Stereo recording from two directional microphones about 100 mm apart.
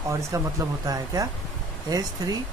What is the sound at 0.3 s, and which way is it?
Speech, 35° right (ahead or behind).